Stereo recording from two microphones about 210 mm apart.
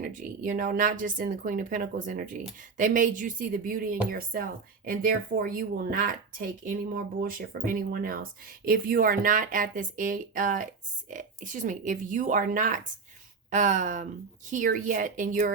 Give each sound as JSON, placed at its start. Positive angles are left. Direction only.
{"t": 0.0, "sound": "a woman's voice", "side_deg": -40}